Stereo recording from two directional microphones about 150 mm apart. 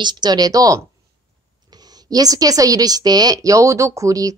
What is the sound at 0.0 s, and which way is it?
Speech, 30° right (ahead or behind).